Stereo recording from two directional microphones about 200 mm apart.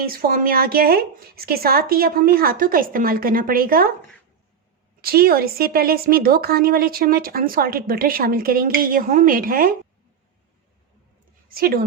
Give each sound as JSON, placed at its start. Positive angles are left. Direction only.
{"t": 0.0, "sound": "speech", "side_deg": -45}
{"t": 4.9, "sound": "speech", "side_deg": -50}
{"t": 11.4, "sound": "a woman's voice", "side_deg": -50}